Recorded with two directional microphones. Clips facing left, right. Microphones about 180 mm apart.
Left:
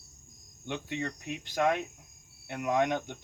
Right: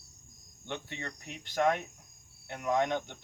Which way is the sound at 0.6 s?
10° left (ahead or behind).